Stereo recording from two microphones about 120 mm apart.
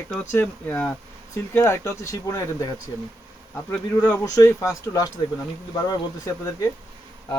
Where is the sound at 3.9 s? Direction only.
15° left (ahead or behind).